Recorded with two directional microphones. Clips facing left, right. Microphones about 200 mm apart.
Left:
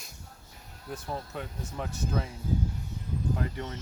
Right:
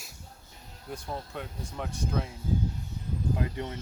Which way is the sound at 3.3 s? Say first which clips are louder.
Right 4 dB; 15° right (ahead or behind).